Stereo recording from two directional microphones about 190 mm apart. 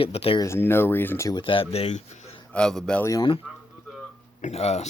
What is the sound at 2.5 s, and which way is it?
Speech, 5° left (ahead or behind).